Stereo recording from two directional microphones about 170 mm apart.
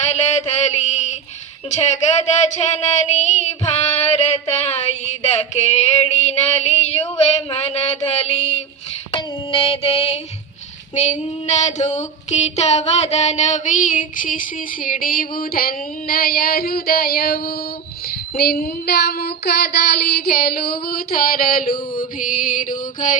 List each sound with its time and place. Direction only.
0.1 s a sound: 40° left (ahead or behind)
9.1 s female singing: 30° left (ahead or behind); by 17.5 s 65° left (ahead or behind)
18.3 s child singing: 65° left (ahead or behind)